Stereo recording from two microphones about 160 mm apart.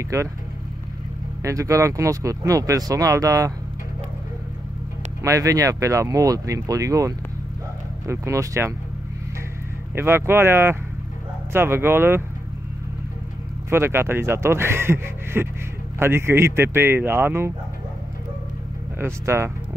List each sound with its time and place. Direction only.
0.1 s speech: 20° right (ahead or behind)
1.4 s speech: 20° right (ahead or behind)
5.2 s speech: 20° right (ahead or behind)
9.9 s speech: 15° right (ahead or behind)
13.7 s speech: 15° right (ahead or behind)
18.9 s speech: 15° right (ahead or behind)